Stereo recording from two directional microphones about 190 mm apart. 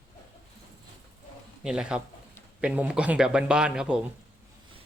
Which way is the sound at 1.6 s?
5° right (ahead or behind).